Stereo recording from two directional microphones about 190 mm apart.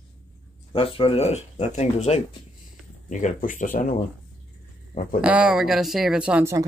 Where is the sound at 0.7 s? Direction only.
30° left (ahead or behind); by 3.9 s 45° left (ahead or behind).